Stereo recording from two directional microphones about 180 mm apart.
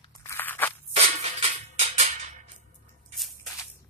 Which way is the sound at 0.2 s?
15° left (ahead or behind).